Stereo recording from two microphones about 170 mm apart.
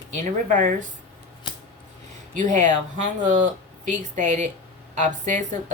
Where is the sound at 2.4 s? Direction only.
45° right (ahead or behind).